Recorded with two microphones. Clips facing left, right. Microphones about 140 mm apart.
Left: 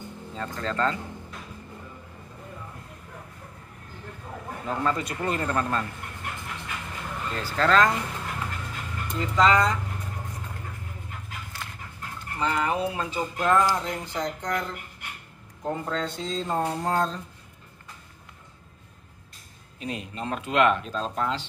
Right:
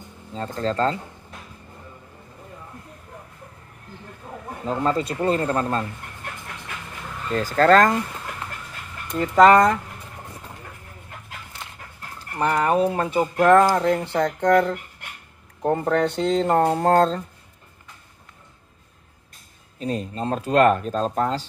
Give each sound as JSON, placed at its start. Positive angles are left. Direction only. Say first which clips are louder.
{"t": 0.4, "sound": "speech", "louder": "right 5 dB", "side_deg": -35}
{"t": 4.6, "sound": "speech", "louder": "right 5 dB", "side_deg": -30}
{"t": 7.3, "sound": "speech", "louder": "right 6 dB", "side_deg": -45}
{"t": 9.1, "sound": "speech", "louder": "right 7 dB", "side_deg": -55}
{"t": 12.4, "sound": "speech", "louder": "right 6 dB", "side_deg": -55}
{"t": 19.8, "sound": "speech", "louder": "right 7 dB", "side_deg": -35}